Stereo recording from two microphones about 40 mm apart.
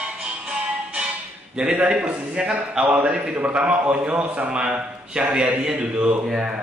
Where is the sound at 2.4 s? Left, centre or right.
Centre.